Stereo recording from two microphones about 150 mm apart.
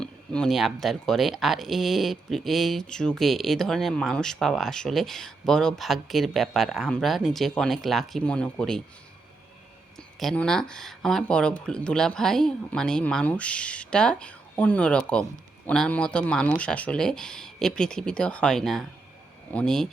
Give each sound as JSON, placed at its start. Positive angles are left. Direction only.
{"t": 0.0, "sound": "speech", "side_deg": 5}
{"t": 10.2, "sound": "speech", "side_deg": 5}